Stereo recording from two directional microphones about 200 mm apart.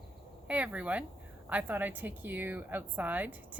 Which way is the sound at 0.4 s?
5° right (ahead or behind).